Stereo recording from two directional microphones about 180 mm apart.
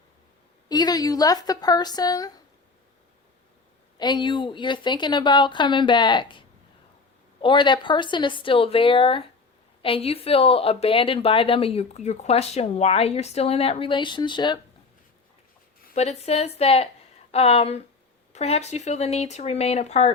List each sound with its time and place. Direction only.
0.7 s speech: 20° left (ahead or behind)
3.9 s speech: 25° left (ahead or behind)
7.4 s a woman's voice: 25° left (ahead or behind)
16.0 s a woman's voice: 35° left (ahead or behind)